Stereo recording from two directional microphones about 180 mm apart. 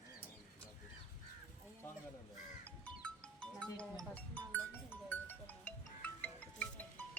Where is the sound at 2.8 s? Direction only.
5° left (ahead or behind).